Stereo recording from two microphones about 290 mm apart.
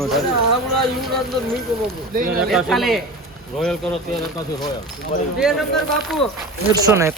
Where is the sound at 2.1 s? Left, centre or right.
Right.